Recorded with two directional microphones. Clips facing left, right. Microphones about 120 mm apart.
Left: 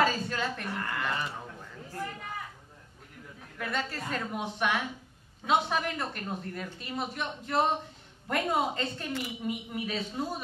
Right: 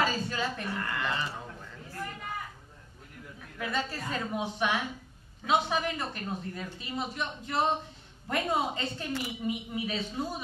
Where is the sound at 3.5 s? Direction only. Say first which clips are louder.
Right 1 dB; 5° right (ahead or behind).